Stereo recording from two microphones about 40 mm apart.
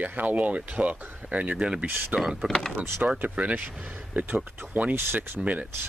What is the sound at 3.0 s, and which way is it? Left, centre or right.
Speech, right.